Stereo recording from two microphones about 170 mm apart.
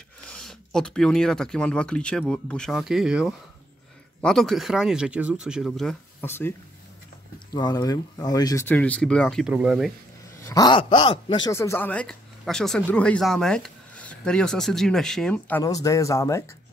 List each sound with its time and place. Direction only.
0.3 s speech: 5° left (ahead or behind)
6.2 s speech: 15° left (ahead or behind)
7.5 s speech: 20° left (ahead or behind)
8.6 s speech: 10° left (ahead or behind)
9.5 s speech: 5° right (ahead or behind)
10.4 s speech: 20° left (ahead or behind)
11.5 s speech: 15° left (ahead or behind)
15.6 s speech: 20° left (ahead or behind)